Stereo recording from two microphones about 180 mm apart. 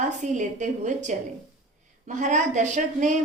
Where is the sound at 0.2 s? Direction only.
45° right (ahead or behind).